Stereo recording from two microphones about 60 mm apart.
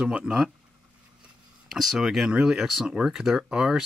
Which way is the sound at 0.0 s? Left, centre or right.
Centre.